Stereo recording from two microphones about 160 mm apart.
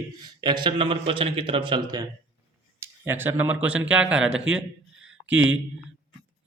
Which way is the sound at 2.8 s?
15° right (ahead or behind).